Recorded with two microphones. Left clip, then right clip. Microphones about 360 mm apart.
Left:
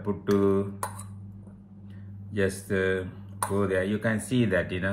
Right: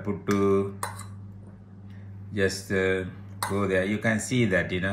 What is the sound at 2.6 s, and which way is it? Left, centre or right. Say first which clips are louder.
Speech: right 1 dB; centre.